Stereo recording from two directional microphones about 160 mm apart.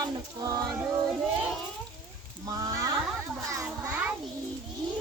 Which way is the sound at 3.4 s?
20° right (ahead or behind).